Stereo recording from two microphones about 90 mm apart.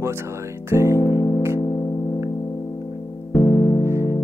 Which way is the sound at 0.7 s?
30° right (ahead or behind).